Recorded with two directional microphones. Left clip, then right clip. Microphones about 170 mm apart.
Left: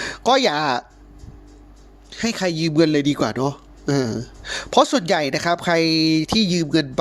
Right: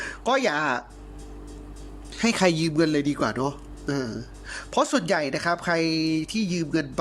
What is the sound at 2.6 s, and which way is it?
Speech, 15° left (ahead or behind).